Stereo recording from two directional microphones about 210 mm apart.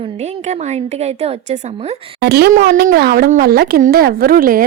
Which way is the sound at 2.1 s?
50° right (ahead or behind).